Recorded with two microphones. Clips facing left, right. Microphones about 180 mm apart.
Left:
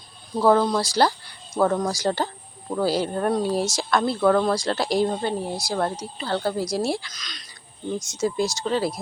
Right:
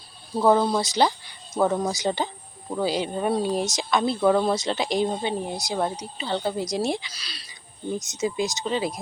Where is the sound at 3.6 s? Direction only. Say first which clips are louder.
Left 1 dB; 20° right (ahead or behind).